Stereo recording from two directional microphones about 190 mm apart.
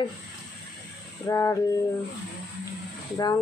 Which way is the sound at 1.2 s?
15° left (ahead or behind).